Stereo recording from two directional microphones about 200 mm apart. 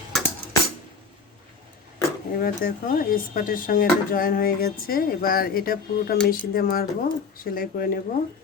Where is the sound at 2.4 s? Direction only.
45° left (ahead or behind).